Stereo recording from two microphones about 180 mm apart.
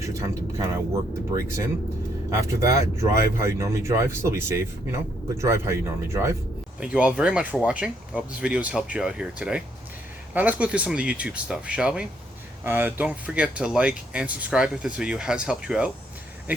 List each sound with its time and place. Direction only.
0.0 s speech: 15° right (ahead or behind)